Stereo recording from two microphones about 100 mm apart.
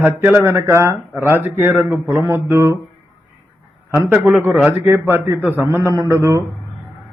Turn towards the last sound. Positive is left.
turn(degrees=-30)  # may be behind; listen again after turning